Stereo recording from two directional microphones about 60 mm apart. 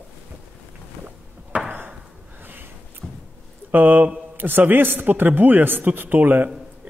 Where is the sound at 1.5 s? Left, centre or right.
Right.